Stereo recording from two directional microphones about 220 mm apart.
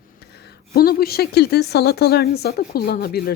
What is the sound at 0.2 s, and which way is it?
A woman's voice, 45° left (ahead or behind).